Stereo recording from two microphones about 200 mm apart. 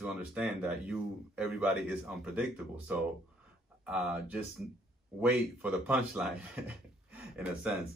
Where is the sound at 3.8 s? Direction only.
5° right (ahead or behind).